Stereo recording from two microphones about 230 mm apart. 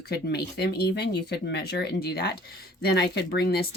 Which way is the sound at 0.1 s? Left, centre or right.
Left.